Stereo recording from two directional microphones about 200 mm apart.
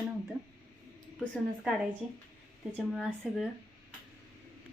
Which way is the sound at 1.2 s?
Centre (ahead or behind).